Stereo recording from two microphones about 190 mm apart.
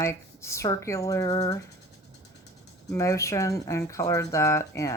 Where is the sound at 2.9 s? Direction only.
15° left (ahead or behind).